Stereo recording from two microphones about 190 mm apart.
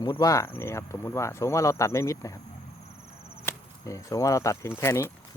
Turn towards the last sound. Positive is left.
turn(degrees=15)  # may be behind; listen again after turning